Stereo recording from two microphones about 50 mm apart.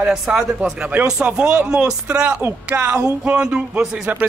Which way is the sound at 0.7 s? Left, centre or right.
Right.